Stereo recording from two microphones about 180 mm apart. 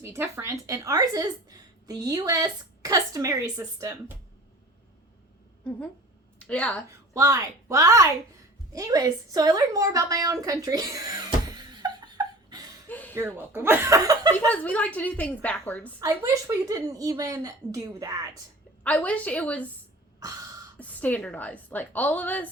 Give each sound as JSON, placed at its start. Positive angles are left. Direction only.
{"t": 0.0, "sound": "a woman's voice", "side_deg": -15}
{"t": 6.4, "sound": "a woman's voice", "side_deg": 5}
{"t": 6.8, "sound": "a woman's voice", "side_deg": -15}
{"t": 12.9, "sound": "a sound", "side_deg": 10}
{"t": 13.1, "sound": "a woman's voice", "side_deg": -10}
{"t": 14.4, "sound": "a woman's voice", "side_deg": 10}
{"t": 16.0, "sound": "a woman's voice", "side_deg": -20}
{"t": 18.8, "sound": "a woman's voice", "side_deg": 10}
{"t": 20.7, "sound": "a woman's voice", "side_deg": 10}